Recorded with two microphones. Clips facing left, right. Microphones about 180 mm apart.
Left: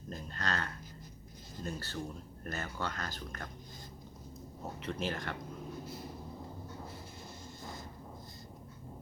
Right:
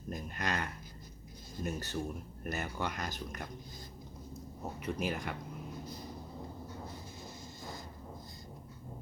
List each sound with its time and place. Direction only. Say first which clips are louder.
0.1 s a sound: right 1 dB; 15° right (ahead or behind)
1.5 s speech: right 3 dB; 15° right (ahead or behind)
4.8 s speech: right 1 dB; 10° right (ahead or behind)